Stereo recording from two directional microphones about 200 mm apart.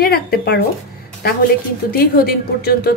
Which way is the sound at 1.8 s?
50° left (ahead or behind).